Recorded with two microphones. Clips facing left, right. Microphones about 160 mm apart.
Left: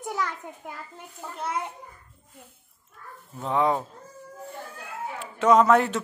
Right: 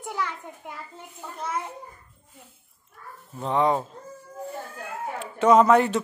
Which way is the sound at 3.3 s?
Centre (ahead or behind).